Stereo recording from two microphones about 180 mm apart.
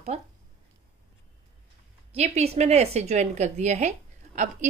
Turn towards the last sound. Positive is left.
turn(degrees=-40)  # may be behind; listen again after turning